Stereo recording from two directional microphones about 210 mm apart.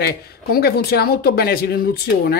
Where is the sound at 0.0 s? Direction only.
50° left (ahead or behind).